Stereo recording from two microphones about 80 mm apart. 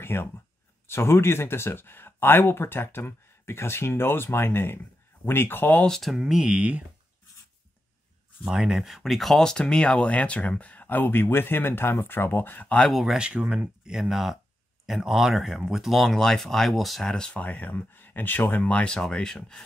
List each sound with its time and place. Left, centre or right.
0.0 s speech: left
5.8 s speech: centre
8.5 s speech: centre; by 12.6 s left
12.6 s speech: centre
12.9 s speech: centre